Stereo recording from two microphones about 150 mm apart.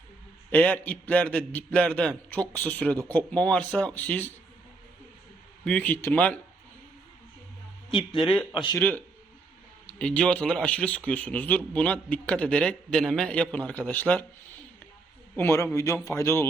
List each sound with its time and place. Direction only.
0.5 s speech: 10° left (ahead or behind)
5.6 s speech: 10° left (ahead or behind)
7.9 s speech: 35° left (ahead or behind)
8.2 s speech: 5° left (ahead or behind)
8.8 s speech: 15° left (ahead or behind)
15.4 s a man's voice: 15° left (ahead or behind)